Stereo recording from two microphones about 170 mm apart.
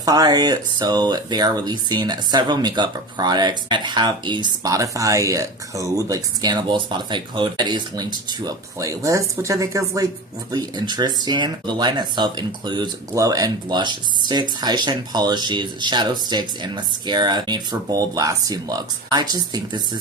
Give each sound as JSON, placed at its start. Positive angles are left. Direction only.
{"t": 0.0, "sound": "speech", "side_deg": -25}